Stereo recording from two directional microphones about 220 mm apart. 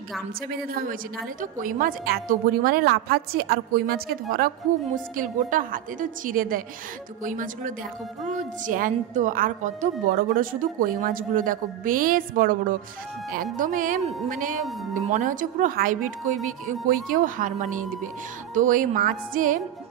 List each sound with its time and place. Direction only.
1.4 s a woman's voice: 40° right (ahead or behind)